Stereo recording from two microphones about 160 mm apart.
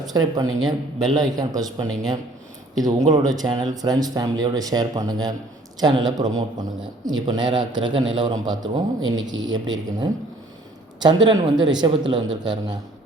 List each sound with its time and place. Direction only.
0.0 s a man's voice: 25° right (ahead or behind)